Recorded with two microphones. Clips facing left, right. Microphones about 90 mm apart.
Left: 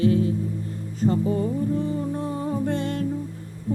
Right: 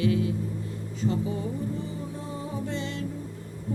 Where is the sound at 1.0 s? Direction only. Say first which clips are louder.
Left 6 dB; 50° left (ahead or behind).